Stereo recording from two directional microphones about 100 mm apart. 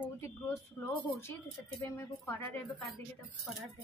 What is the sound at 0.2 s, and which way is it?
A woman's voice, 25° left (ahead or behind).